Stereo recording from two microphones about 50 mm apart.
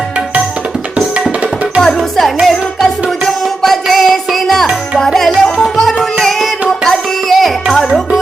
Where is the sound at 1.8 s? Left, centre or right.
Centre.